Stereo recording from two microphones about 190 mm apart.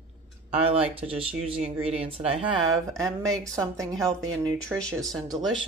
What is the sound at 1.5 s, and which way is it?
Speech, 30° right (ahead or behind).